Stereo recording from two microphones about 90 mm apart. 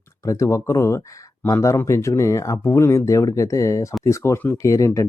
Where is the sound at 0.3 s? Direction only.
35° left (ahead or behind).